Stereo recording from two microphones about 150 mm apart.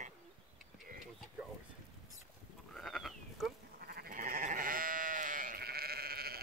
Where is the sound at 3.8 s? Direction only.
90° right.